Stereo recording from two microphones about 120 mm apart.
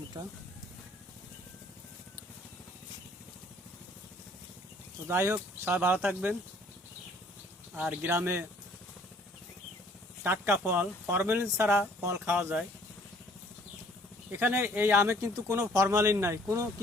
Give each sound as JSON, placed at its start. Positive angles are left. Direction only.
{"t": 5.0, "sound": "speech", "side_deg": -20}
{"t": 7.8, "sound": "speech", "side_deg": -15}
{"t": 10.2, "sound": "speech", "side_deg": -20}
{"t": 14.3, "sound": "speech", "side_deg": -15}